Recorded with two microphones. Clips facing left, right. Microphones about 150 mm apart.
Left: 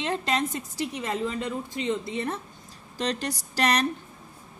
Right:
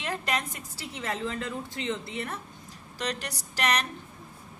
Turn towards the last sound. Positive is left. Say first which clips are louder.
# left 4 dB
turn(degrees=35)  # may be behind; listen again after turning